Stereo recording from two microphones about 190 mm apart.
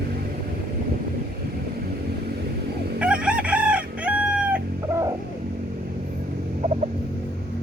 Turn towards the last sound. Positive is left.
turn(degrees=-35)  # may be behind; listen again after turning